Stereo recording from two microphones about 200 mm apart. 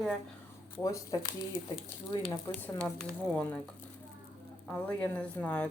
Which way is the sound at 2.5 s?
20° left (ahead or behind).